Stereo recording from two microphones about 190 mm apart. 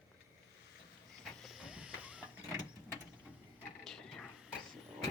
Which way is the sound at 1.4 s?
Centre (ahead or behind).